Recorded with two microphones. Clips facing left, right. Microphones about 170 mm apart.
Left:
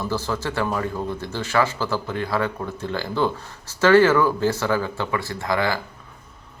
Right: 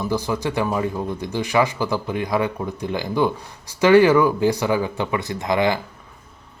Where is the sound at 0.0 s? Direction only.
15° right (ahead or behind).